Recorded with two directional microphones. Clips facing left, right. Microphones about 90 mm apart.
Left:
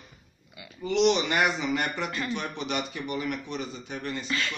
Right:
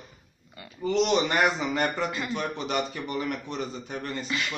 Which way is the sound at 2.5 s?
40° right (ahead or behind).